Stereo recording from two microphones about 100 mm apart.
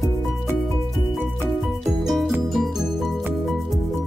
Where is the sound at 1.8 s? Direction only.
Centre (ahead or behind).